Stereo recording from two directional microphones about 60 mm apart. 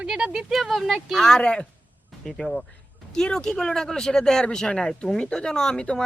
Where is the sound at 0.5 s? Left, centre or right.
Centre.